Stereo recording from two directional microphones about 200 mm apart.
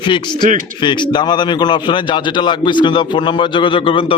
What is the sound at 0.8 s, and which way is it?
A man's voice, 20° left (ahead or behind).